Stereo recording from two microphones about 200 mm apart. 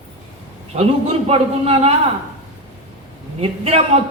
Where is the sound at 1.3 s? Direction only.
30° right (ahead or behind).